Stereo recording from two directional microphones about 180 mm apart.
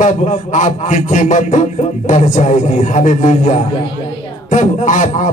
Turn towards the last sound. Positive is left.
turn(degrees=45)  # may be behind; listen again after turning